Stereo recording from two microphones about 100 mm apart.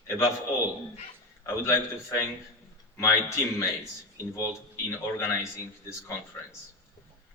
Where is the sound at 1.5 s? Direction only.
25° left (ahead or behind).